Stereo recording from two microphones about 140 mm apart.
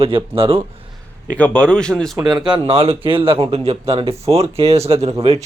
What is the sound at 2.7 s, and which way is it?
Speech, 45° right (ahead or behind).